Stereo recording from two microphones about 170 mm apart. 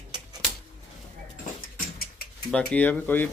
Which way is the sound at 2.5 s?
10° left (ahead or behind).